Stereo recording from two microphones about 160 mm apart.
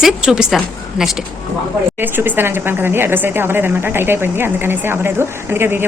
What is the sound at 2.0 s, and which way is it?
Speech, 10° right (ahead or behind).